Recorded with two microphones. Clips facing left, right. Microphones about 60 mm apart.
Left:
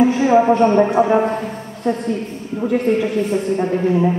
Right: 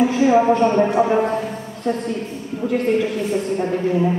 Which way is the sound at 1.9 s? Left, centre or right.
Left.